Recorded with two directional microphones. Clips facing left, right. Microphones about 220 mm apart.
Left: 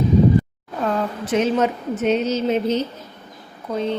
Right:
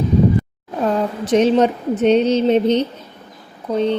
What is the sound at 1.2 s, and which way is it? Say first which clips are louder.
A woman's voice: right 6 dB; 35° right (ahead or behind).